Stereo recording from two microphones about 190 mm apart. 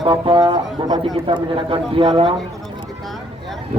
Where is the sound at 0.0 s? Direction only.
25° right (ahead or behind).